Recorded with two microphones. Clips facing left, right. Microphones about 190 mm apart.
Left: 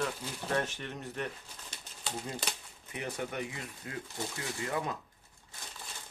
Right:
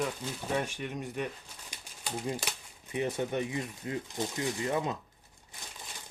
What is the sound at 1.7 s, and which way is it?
Typewriter, 10° right (ahead or behind).